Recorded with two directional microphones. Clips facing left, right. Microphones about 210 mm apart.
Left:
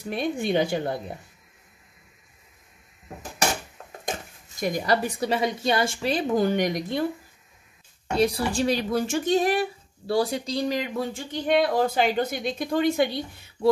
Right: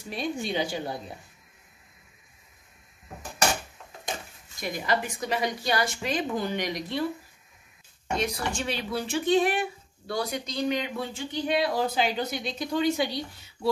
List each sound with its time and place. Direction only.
0.0 s speech: 55° left (ahead or behind)
4.6 s a woman's voice: 45° left (ahead or behind)
8.2 s speech: 35° left (ahead or behind); by 13.2 s 55° left (ahead or behind)